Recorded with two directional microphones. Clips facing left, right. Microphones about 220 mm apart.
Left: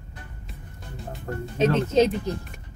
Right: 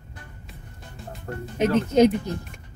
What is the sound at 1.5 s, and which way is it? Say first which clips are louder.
Speech: right 1 dB; 15° right (ahead or behind).